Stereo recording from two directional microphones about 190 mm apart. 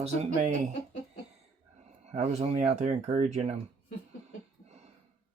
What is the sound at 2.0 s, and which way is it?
Speech, 35° right (ahead or behind).